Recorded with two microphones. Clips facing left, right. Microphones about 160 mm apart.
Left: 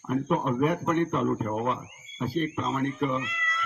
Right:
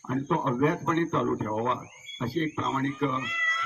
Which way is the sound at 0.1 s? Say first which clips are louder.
Left 1 dB; 10° left (ahead or behind).